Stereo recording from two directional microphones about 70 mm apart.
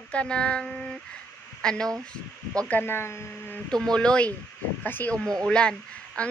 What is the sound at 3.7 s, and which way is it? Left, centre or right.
Speech, centre.